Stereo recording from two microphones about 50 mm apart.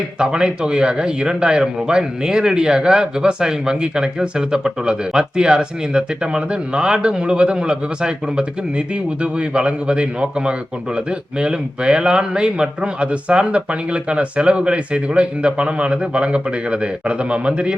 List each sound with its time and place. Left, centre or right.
0.2 s a man's voice: centre